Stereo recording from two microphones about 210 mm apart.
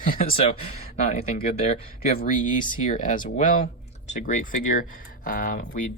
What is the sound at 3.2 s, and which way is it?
Speech, 40° left (ahead or behind).